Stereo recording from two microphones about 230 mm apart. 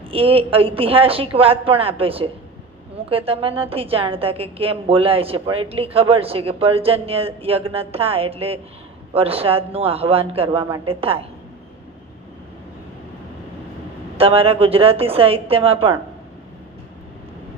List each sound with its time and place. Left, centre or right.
0.1 s a woman's voice: right
14.2 s a woman's voice: right